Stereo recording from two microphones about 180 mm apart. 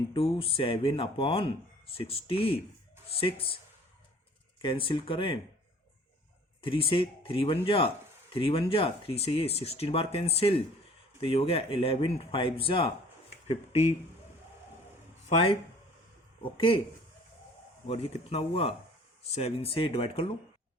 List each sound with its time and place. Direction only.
0.1 s speech: 30° left (ahead or behind)
4.6 s speech: 30° left (ahead or behind)
6.6 s speech: 30° left (ahead or behind)
15.3 s speech: 30° left (ahead or behind)
17.8 s speech: 35° left (ahead or behind)